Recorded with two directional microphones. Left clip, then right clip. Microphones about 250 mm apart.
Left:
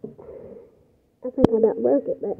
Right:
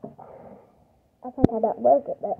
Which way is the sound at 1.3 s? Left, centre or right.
Left.